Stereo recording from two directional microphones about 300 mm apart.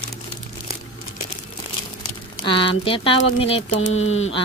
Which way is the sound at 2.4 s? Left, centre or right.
Centre.